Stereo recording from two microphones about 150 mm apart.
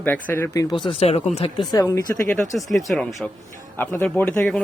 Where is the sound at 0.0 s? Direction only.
10° left (ahead or behind).